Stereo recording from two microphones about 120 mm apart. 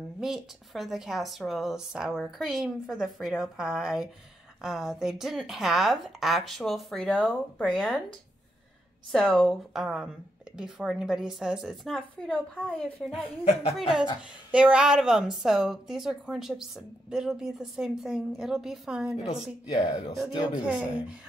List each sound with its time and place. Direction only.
0.2 s a woman's voice: 5° right (ahead or behind)
9.1 s a woman's voice: 5° left (ahead or behind)
13.4 s speech: 60° left (ahead or behind)
13.7 s a woman's voice: 5° right (ahead or behind)
20.6 s speech: 10° right (ahead or behind)